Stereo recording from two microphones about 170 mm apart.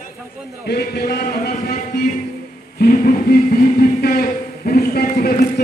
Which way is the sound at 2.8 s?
55° left (ahead or behind).